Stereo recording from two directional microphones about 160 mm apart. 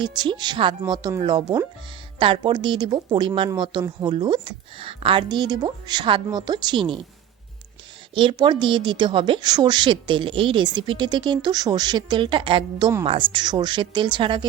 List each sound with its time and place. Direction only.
0.0 s a woman's voice: 30° right (ahead or behind)
8.1 s a woman's voice: 30° right (ahead or behind)